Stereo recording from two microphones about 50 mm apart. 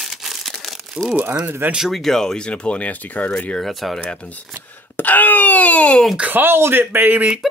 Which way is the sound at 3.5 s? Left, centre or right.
Centre.